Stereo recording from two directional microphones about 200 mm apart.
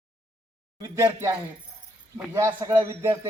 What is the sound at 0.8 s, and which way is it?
Speech, 15° right (ahead or behind).